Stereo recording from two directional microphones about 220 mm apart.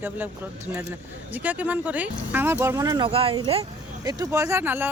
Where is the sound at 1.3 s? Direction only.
5° right (ahead or behind); by 3.6 s 25° right (ahead or behind).